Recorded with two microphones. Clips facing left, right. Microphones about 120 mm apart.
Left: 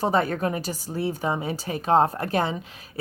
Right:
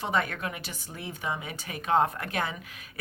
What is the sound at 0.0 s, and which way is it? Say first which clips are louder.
Speech: left 7 dB; 35° left (ahead or behind).